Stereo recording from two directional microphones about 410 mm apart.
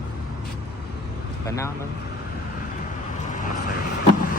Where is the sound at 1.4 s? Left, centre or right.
Centre.